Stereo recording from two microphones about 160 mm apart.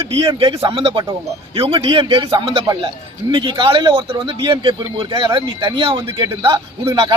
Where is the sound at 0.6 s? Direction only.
35° right (ahead or behind).